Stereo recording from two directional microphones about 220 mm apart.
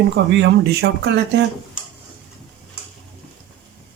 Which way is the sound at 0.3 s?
50° right (ahead or behind).